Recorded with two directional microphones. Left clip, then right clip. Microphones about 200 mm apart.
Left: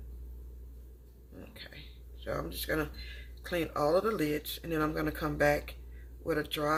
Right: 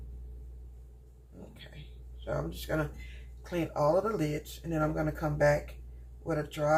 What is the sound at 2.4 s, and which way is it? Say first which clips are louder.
Speech: even; 50° left (ahead or behind).